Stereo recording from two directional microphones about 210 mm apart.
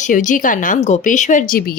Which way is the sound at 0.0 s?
35° left (ahead or behind).